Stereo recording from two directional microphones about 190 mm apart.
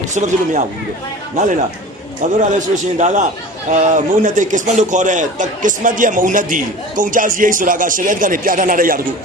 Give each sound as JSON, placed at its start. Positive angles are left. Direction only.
{"t": 0.1, "sound": "a man's voice", "side_deg": -40}
{"t": 2.4, "sound": "a man's voice", "side_deg": -40}